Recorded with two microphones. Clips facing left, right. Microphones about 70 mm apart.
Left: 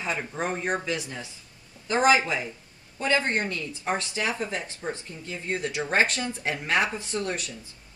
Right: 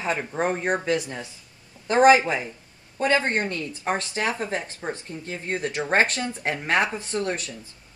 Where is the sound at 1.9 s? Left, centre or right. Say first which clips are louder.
Right 5 dB; right.